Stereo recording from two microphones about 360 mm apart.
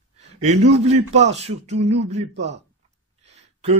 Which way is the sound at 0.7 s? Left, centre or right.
Centre.